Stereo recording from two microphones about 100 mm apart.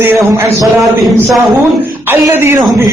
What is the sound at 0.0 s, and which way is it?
Speech, 25° right (ahead or behind).